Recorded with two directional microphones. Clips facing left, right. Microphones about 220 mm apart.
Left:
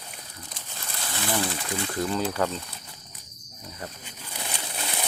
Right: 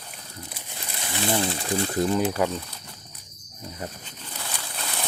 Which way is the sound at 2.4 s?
15° right (ahead or behind).